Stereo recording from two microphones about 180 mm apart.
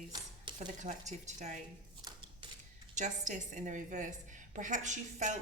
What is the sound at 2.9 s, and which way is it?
A woman's voice, 40° right (ahead or behind).